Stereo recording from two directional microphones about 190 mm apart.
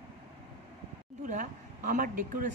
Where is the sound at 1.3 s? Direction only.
45° right (ahead or behind).